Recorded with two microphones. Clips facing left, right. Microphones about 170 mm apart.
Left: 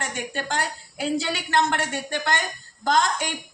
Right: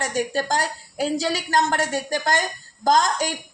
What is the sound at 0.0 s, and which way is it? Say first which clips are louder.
A woman's voice: right 6 dB; 40° right (ahead or behind).